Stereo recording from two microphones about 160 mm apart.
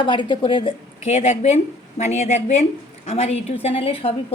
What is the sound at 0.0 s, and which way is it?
Speech, 30° left (ahead or behind).